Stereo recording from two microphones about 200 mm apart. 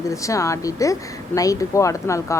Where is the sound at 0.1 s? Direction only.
15° left (ahead or behind).